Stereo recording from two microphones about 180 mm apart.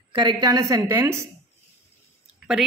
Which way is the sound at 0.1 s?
25° right (ahead or behind).